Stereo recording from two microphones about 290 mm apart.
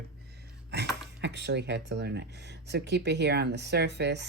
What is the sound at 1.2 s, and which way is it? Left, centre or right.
Speech, right.